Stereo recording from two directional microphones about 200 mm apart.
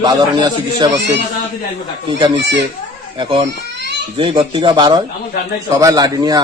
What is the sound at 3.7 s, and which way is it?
Children playing, 60° right (ahead or behind).